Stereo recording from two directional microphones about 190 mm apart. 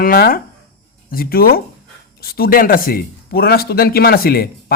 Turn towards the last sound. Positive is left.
turn(degrees=55)  # may be behind; listen again after turning